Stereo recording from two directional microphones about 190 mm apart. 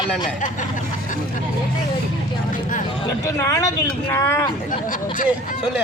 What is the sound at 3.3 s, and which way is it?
Speech, 15° left (ahead or behind).